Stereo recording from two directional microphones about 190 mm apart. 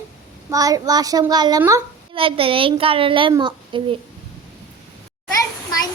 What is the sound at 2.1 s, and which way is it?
A woman's voice, 30° right (ahead or behind).